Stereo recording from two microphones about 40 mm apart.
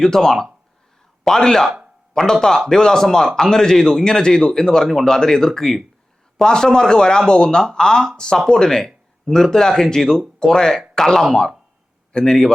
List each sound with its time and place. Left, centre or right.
0.0 s a man's voice: centre